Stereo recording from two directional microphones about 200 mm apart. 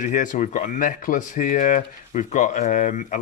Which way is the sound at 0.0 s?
40° left (ahead or behind).